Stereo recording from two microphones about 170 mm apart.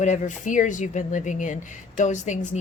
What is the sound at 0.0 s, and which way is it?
A woman's voice, 45° left (ahead or behind).